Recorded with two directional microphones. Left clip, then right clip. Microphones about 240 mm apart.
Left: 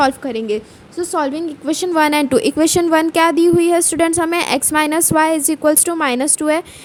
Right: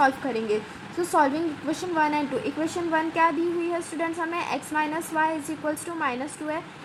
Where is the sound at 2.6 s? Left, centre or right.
Left.